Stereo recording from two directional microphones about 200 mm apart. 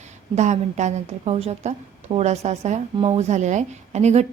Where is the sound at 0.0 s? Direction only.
35° right (ahead or behind).